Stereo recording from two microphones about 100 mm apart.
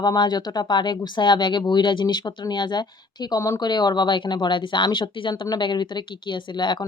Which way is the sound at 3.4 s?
35° left (ahead or behind).